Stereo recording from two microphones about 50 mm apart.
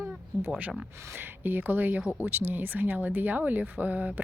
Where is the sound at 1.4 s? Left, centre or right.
Right.